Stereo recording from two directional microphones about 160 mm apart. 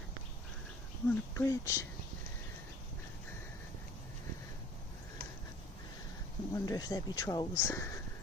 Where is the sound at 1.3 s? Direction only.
20° left (ahead or behind).